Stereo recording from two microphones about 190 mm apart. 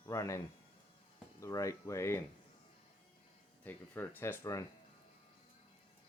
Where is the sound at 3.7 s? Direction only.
10° left (ahead or behind).